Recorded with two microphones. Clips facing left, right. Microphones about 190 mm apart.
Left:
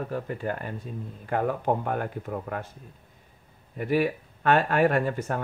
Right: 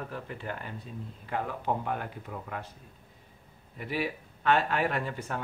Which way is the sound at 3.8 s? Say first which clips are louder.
Left 8 dB; 50° left (ahead or behind).